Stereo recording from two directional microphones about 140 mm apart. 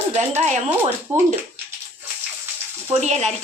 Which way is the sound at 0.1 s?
50° right (ahead or behind).